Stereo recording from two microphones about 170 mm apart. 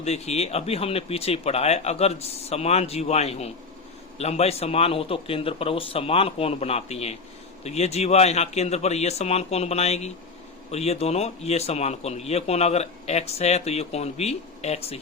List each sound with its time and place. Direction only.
0.0 s a man's voice: 40° left (ahead or behind)